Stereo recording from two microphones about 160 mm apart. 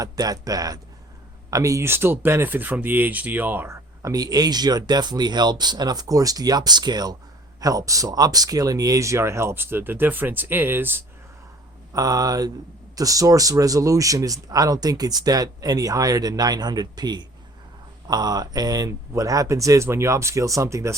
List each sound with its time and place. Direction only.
0.0 s speech: 25° right (ahead or behind)